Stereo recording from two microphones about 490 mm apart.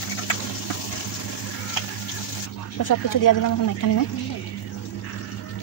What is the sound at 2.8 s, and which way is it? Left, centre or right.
Speech, left.